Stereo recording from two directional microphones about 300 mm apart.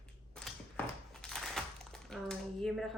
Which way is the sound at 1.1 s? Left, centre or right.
Centre.